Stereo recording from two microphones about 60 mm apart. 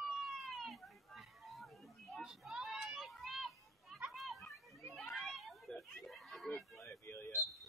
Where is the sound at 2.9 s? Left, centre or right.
Centre.